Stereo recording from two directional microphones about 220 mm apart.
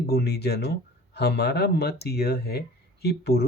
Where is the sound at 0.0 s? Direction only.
45° left (ahead or behind).